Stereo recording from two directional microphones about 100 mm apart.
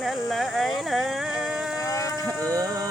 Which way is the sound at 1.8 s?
35° left (ahead or behind).